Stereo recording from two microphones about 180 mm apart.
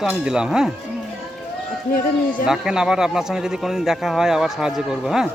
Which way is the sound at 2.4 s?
5° right (ahead or behind).